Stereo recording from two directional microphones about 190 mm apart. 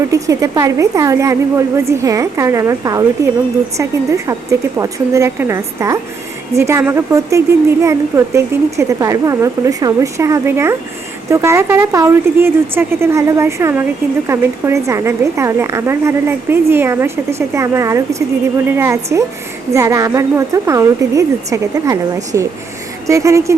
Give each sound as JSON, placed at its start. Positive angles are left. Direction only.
{"t": 0.1, "sound": "a woman's voice", "side_deg": -15}